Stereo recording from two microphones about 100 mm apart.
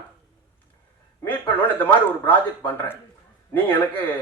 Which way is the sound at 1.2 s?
15° left (ahead or behind).